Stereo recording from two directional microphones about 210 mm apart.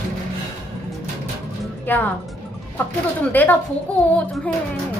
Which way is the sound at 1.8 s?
10° left (ahead or behind).